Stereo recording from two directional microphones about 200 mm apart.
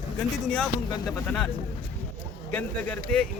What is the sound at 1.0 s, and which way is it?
Speech, 5° left (ahead or behind).